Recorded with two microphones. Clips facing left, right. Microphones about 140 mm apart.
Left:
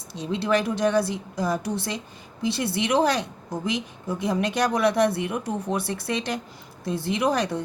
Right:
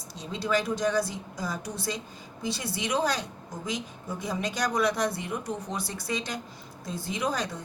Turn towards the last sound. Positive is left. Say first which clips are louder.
# left 7 dB
turn(degrees=65)  # may be behind; listen again after turning